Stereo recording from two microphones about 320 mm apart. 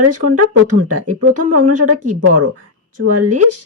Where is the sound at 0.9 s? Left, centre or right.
Right.